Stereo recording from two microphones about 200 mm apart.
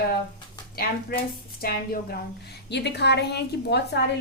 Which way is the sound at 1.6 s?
50° left (ahead or behind).